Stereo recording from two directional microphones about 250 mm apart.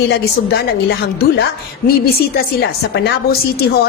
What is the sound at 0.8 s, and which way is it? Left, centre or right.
A woman's voice, left.